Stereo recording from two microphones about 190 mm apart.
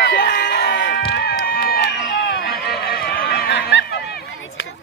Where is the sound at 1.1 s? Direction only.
55° left (ahead or behind).